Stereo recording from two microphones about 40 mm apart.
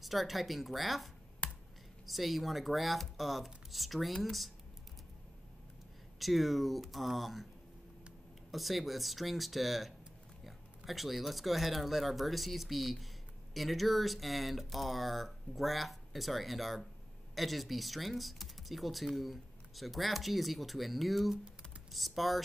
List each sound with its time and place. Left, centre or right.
0.0 s speech: centre
1.4 s a sound: left
2.0 s speech: centre
6.1 s speech: centre
8.5 s speech: centre